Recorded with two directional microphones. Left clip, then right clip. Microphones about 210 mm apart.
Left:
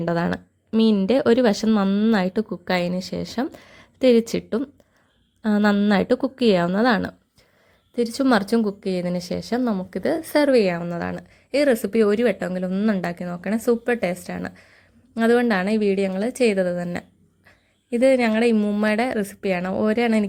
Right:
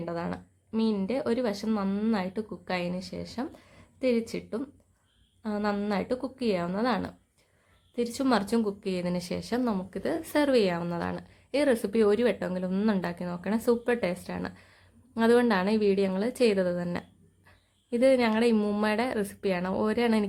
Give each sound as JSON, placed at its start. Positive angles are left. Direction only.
{"t": 0.0, "sound": "a woman's voice", "side_deg": 35}